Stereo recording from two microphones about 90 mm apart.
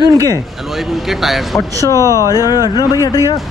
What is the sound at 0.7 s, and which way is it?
Speech, centre (ahead or behind).